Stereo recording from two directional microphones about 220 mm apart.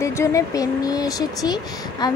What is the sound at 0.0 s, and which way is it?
A woman's voice, 15° left (ahead or behind).